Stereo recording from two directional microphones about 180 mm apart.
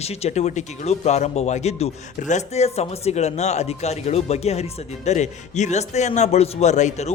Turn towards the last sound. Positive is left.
turn(degrees=40)  # may be behind; listen again after turning